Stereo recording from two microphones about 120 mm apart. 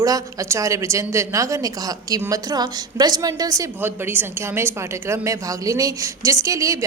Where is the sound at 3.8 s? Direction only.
20° right (ahead or behind).